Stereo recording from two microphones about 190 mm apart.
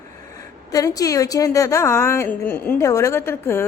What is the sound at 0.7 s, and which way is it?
A woman's voice, 20° left (ahead or behind).